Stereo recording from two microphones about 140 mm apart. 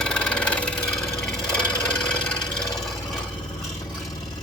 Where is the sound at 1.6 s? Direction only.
10° left (ahead or behind).